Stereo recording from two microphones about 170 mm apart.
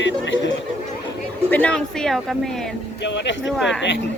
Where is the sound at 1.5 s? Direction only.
5° left (ahead or behind).